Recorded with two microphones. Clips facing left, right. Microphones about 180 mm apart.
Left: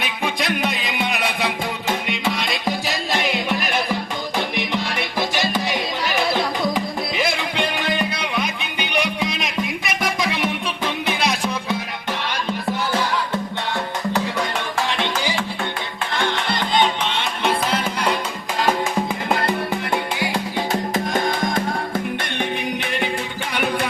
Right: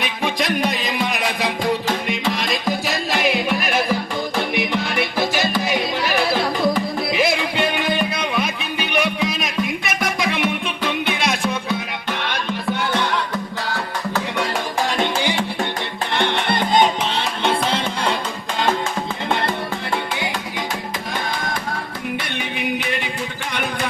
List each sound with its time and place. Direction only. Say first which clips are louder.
0.3 s music: right 3 dB; centre (ahead or behind)
7.2 s music: right 3 dB; 5° right (ahead or behind)
8.8 s music: right 2 dB; centre (ahead or behind)
14.8 s music: right 3 dB; 45° right (ahead or behind)
16.1 s music: right 3 dB; 60° right (ahead or behind)
17.5 s music: even; 30° right (ahead or behind)